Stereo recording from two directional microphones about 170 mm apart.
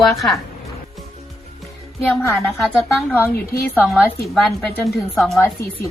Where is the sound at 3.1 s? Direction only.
10° left (ahead or behind).